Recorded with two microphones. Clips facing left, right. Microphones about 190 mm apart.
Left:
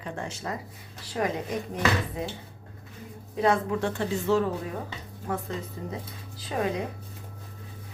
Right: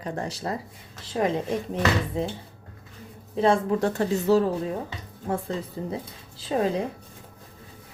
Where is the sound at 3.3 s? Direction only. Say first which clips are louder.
Right 3 dB; 30° right (ahead or behind).